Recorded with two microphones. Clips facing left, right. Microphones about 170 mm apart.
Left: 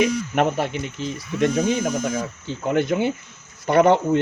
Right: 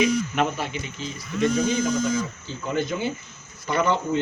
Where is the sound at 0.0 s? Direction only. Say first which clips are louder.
Left 2 dB; 60° left (ahead or behind).